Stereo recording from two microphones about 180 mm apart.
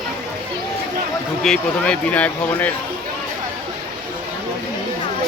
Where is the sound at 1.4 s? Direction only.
5° left (ahead or behind).